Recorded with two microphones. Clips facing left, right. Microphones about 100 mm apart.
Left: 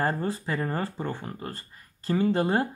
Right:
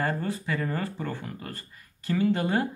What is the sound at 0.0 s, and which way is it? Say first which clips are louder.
Speech: left 2 dB; 35° left (ahead or behind).